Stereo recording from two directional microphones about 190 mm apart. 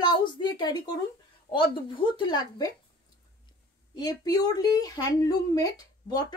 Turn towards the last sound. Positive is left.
turn(degrees=20)  # may be behind; listen again after turning